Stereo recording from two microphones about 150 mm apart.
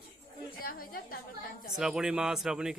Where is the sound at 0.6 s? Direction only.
75° left (ahead or behind).